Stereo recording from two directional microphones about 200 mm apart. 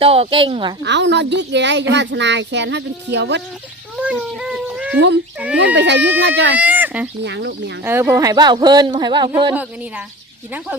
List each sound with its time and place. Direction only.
0.0 s speech: 30° right (ahead or behind)
0.8 s speech: 60° right (ahead or behind)
3.9 s a sound: 5° right (ahead or behind)
5.4 s speech: 5° right (ahead or behind)
5.7 s speech: 60° right (ahead or behind)
6.6 s a sound: 10° right (ahead or behind)
7.3 s speech: 60° right (ahead or behind)
7.9 s speech: 10° right (ahead or behind)